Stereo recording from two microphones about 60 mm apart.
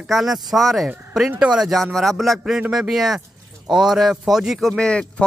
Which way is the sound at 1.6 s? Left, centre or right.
Centre.